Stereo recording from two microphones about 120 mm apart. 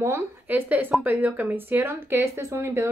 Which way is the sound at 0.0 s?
20° right (ahead or behind).